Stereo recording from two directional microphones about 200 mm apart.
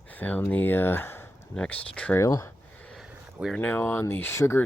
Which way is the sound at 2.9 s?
Centre (ahead or behind).